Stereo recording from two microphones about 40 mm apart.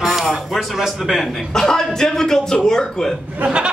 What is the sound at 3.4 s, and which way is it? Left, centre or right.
Speech, right.